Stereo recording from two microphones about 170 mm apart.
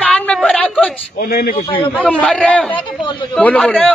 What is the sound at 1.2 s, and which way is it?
Speech, 65° left (ahead or behind).